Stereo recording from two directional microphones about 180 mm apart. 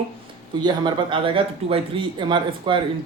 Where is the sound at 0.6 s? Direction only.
25° right (ahead or behind).